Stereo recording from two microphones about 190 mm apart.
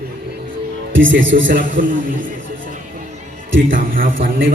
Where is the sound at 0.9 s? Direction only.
80° right.